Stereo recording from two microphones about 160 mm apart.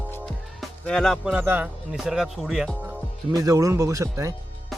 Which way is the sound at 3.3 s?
20° right (ahead or behind).